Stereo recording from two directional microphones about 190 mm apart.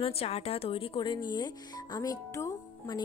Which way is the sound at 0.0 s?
30° left (ahead or behind).